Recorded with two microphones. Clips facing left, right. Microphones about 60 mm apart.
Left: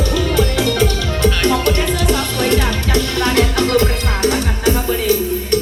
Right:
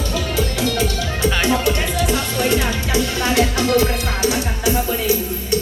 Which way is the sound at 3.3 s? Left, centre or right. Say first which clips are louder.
Left 1 dB; left.